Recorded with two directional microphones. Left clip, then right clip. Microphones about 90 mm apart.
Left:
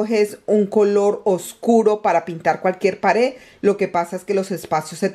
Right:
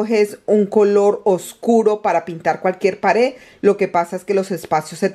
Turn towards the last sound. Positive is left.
turn(degrees=-15)  # may be behind; listen again after turning